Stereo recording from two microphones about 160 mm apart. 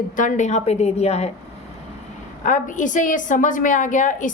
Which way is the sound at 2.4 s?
55° left (ahead or behind).